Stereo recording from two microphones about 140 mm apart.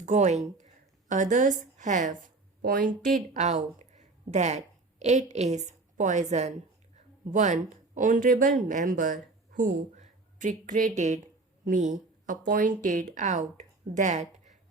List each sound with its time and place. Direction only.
0.0 s a woman's voice: 60° right (ahead or behind); by 2.9 s 90° right
3.3 s a woman's voice: 55° right (ahead or behind)
7.3 s speech: 60° right (ahead or behind)
11.6 s a sound: 65° right (ahead or behind)
12.5 s speech: 75° right (ahead or behind); by 14.5 s 60° right (ahead or behind)